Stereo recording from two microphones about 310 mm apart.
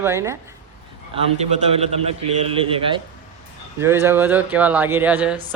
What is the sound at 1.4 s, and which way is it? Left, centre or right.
A man's voice, centre.